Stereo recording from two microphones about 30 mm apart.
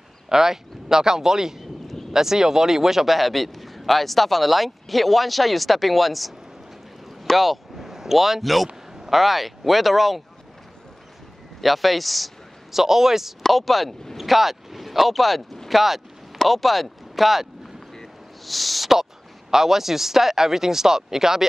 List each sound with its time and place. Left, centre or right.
0.3 s speech: centre
3.2 s a man's voice: centre
7.1 s a sound: centre
7.7 s a sound: centre
9.1 s a man's voice: centre
11.6 s a man's voice: centre
12.7 s speech: centre
13.5 s a man's voice: centre
19.5 s speech: centre